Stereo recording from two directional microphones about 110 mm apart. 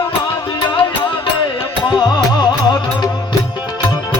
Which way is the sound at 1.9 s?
40° left (ahead or behind).